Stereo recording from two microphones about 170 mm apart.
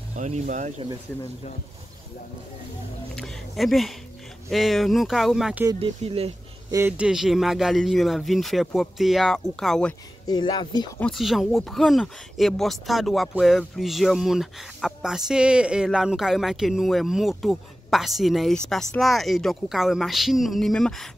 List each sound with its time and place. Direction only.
0.1 s speech: 45° right (ahead or behind)
3.2 s speech: centre (ahead or behind)
5.7 s speech: 35° right (ahead or behind)
6.7 s speech: 10° right (ahead or behind)
10.2 s speech: 25° left (ahead or behind)
11.0 s speech: centre (ahead or behind)